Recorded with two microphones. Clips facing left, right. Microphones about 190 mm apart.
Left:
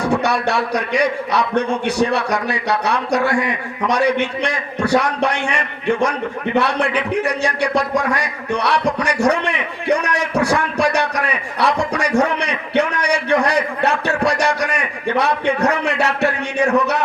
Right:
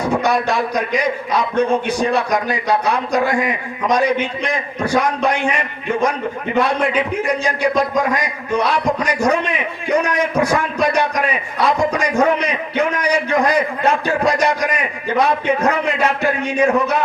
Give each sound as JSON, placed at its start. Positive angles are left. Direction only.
{"t": 0.0, "sound": "a man's voice", "side_deg": 75}
{"t": 6.6, "sound": "a man's voice", "side_deg": 75}